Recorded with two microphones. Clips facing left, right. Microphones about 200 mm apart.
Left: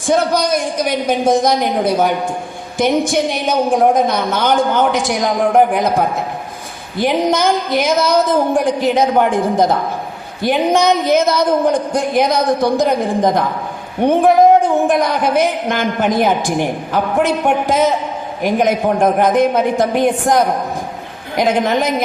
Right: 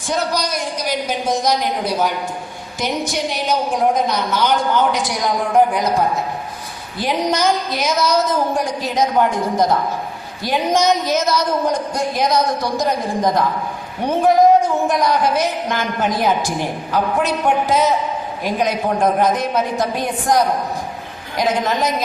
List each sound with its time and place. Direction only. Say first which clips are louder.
0.0 s a woman's voice: left 6 dB; 55° left (ahead or behind)
14.0 s a woman's voice: left 3 dB; 60° left (ahead or behind)